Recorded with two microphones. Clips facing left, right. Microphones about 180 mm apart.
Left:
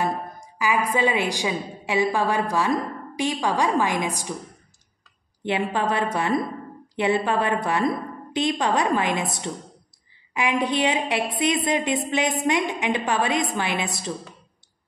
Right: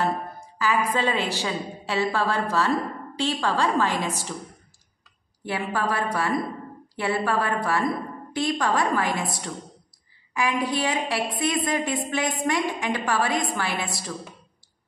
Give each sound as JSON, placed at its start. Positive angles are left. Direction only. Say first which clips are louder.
{"t": 0.6, "sound": "a woman's voice", "louder": "left 1 dB", "side_deg": 15}
{"t": 5.4, "sound": "a woman's voice", "louder": "left 3 dB", "side_deg": 20}